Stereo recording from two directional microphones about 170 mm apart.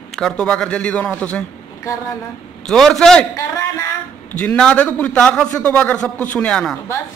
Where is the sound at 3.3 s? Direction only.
15° left (ahead or behind).